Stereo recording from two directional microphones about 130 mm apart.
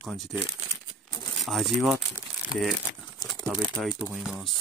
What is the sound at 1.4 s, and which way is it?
Speech, centre (ahead or behind).